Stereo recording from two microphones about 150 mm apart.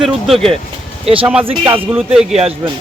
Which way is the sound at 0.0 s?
Centre (ahead or behind).